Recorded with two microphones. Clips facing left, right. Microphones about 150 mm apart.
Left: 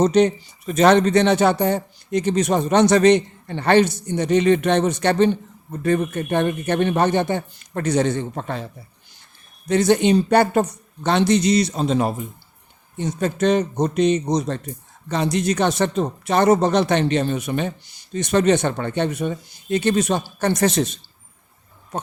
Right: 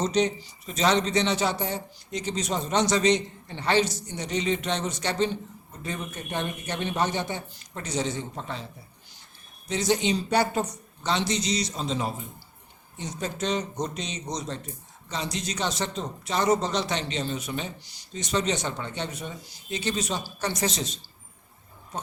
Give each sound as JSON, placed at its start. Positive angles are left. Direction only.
{"t": 0.0, "sound": "speech", "side_deg": 55}
{"t": 9.6, "sound": "speech", "side_deg": 60}